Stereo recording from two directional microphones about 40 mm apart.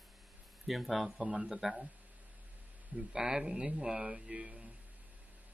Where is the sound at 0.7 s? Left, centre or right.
Centre.